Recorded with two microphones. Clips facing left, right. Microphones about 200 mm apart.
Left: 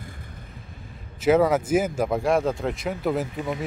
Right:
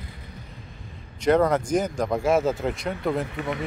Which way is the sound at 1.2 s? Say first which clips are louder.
Left 1 dB; 5° left (ahead or behind).